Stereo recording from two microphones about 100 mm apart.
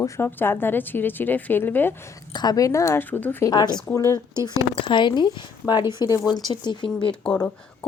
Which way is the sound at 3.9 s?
25° left (ahead or behind).